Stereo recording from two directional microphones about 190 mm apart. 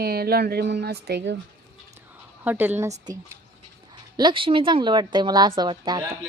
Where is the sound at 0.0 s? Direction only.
50° right (ahead or behind).